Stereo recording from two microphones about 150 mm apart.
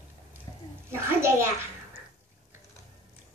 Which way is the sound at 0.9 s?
15° right (ahead or behind).